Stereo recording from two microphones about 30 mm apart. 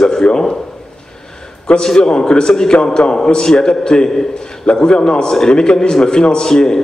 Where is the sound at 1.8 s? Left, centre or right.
Left.